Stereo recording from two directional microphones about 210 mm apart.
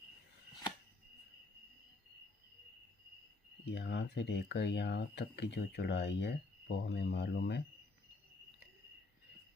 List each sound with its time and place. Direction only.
3.7 s speech: 55° left (ahead or behind)